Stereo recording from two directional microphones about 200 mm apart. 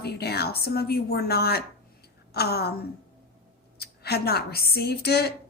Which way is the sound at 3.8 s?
50° left (ahead or behind).